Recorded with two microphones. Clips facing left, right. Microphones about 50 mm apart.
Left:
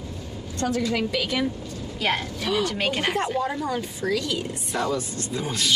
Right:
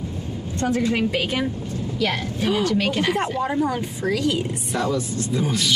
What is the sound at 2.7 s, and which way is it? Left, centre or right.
Speech, left.